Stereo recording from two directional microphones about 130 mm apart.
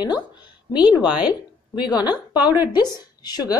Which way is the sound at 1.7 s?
35° left (ahead or behind).